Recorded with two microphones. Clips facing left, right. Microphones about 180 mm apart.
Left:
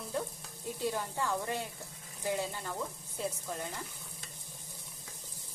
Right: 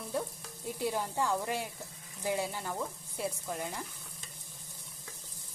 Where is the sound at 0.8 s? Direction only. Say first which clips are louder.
Right 2 dB; 15° right (ahead or behind).